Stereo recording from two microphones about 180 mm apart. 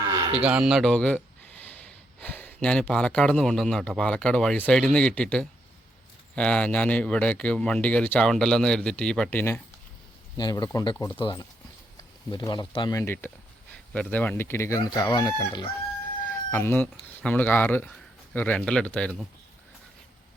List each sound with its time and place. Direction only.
0.4 s a man's voice: 5° right (ahead or behind)
2.2 s a man's voice: 10° left (ahead or behind)
10.3 s speech: 20° left (ahead or behind)
16.3 s a man's voice: 10° left (ahead or behind)